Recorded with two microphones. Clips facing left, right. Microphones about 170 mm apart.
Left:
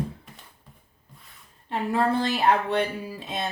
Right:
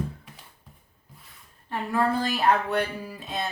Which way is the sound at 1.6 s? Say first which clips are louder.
Left 1 dB; 25° left (ahead or behind).